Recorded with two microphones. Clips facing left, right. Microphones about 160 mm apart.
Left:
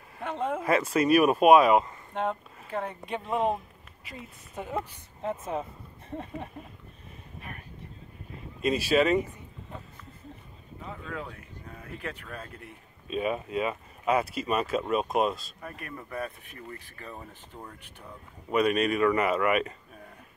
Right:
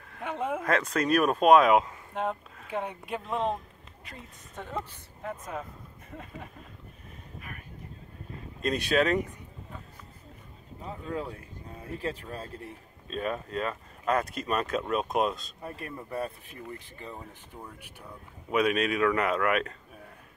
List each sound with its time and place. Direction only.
0.2 s speech: 10° right (ahead or behind)
0.6 s speech: 5° left (ahead or behind); by 3.2 s 10° right (ahead or behind)
3.2 s speech: 5° left (ahead or behind)
5.5 s speech: 30° left (ahead or behind)
8.5 s speech: 5° left (ahead or behind)
10.9 s speech: 30° right (ahead or behind)
13.1 s speech: 5° left (ahead or behind)
15.6 s speech: 30° right (ahead or behind)
17.5 s speech: centre (ahead or behind)